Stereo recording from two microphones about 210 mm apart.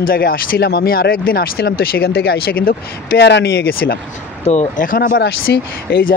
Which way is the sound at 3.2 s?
55° left (ahead or behind).